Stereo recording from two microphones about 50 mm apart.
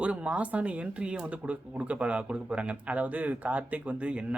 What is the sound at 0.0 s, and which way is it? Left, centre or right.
Speech, right.